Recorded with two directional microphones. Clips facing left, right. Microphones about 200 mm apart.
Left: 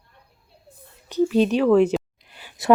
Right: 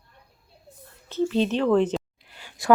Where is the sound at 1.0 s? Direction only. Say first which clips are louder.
Left 4 dB; 15° left (ahead or behind).